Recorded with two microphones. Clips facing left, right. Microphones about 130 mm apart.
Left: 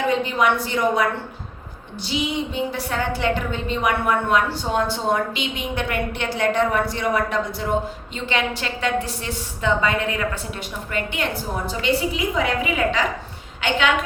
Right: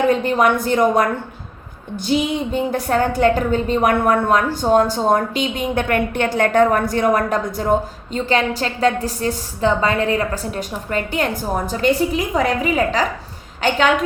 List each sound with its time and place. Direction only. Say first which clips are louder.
0.1 s a woman's voice: right 4 dB; 45° right (ahead or behind)
2.0 s a woman's voice: right 6 dB; 50° right (ahead or behind)